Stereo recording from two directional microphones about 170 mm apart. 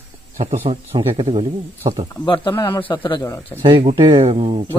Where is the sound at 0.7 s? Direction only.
30° right (ahead or behind).